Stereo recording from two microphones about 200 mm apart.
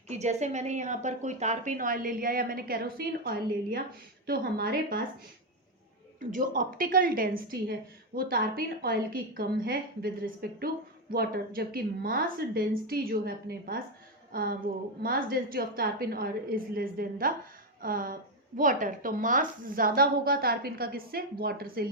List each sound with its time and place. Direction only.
0.1 s a woman's voice: 35° right (ahead or behind)
6.1 s a woman's voice: 45° right (ahead or behind)